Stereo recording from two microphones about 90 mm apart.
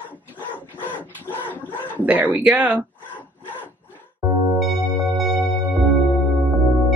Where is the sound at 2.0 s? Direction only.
20° right (ahead or behind).